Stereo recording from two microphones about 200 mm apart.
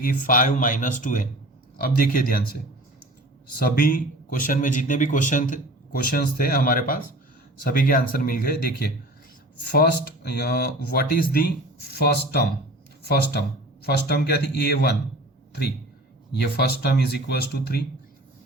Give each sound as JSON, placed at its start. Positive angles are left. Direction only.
{"t": 0.0, "sound": "speech", "side_deg": 45}
{"t": 3.6, "sound": "speech", "side_deg": 45}
{"t": 16.3, "sound": "speech", "side_deg": 55}